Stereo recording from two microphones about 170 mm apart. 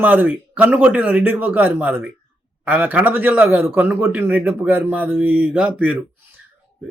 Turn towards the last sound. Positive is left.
turn(degrees=-10)  # may be behind; listen again after turning